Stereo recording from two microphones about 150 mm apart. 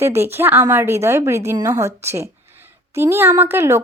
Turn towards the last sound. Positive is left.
turn(degrees=-15)  # may be behind; listen again after turning